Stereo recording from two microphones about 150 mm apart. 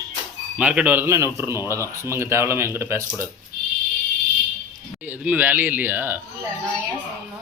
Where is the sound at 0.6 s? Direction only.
10° right (ahead or behind).